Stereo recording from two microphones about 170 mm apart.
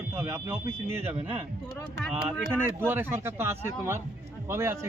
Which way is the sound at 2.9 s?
15° right (ahead or behind).